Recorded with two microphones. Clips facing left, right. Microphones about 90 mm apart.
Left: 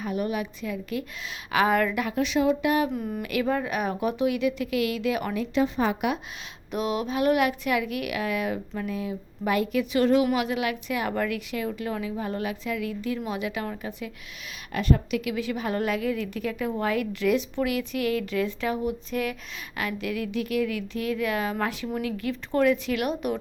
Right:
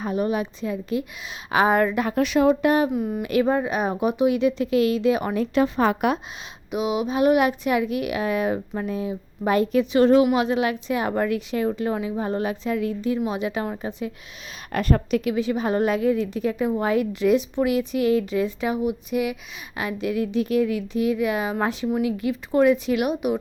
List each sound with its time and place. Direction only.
0.0 s speech: 30° right (ahead or behind)
2.1 s speech: 50° right (ahead or behind); by 2.9 s 35° right (ahead or behind)
2.9 s speech: 5° right (ahead or behind)
3.2 s speech: 30° right (ahead or behind)
5.5 s speech: 55° right (ahead or behind)
6.7 s speech: 10° right (ahead or behind); by 14.1 s 30° right (ahead or behind)
14.7 s speech: 50° right (ahead or behind)
15.2 s a woman's voice: 25° right (ahead or behind)